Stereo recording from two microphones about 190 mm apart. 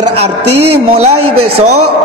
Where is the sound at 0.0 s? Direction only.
35° right (ahead or behind).